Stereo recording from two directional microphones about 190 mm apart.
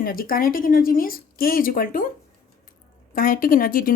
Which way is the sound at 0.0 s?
50° left (ahead or behind).